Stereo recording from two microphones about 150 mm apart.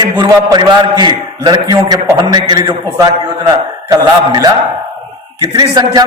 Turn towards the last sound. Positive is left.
turn(degrees=-25)  # may be behind; listen again after turning